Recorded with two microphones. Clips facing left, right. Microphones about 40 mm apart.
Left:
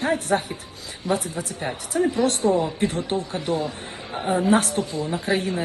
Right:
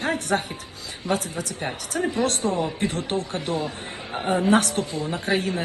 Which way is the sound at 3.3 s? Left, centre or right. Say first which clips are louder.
Left 2 dB; right.